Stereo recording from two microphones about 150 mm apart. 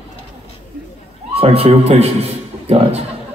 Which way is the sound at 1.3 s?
40° right (ahead or behind).